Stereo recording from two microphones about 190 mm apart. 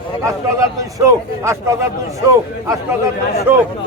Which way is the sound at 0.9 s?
15° right (ahead or behind).